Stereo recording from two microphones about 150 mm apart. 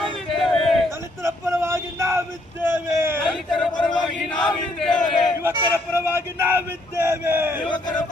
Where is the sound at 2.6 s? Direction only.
15° right (ahead or behind).